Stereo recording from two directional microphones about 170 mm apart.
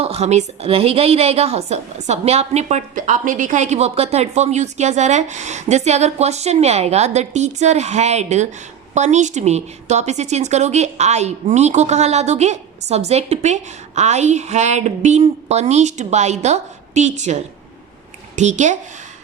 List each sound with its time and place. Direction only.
0.0 s a woman's voice: 35° right (ahead or behind)